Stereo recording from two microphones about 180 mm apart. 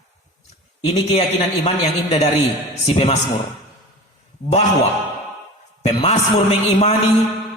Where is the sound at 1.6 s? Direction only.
35° left (ahead or behind).